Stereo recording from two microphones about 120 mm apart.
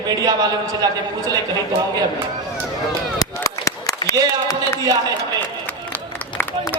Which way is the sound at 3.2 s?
30° left (ahead or behind).